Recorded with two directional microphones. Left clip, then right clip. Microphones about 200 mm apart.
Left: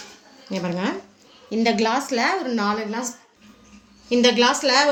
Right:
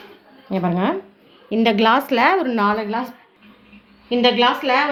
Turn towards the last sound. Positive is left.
turn(degrees=-20)  # may be behind; listen again after turning